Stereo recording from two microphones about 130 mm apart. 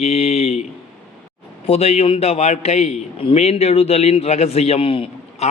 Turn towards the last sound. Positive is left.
turn(degrees=45)  # may be behind; listen again after turning